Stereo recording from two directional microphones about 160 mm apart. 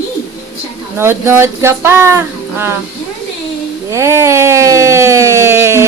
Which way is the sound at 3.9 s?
15° right (ahead or behind).